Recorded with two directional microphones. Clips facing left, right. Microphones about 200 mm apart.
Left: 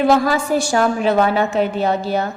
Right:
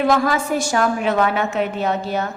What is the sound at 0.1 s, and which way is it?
A woman's voice, 30° left (ahead or behind).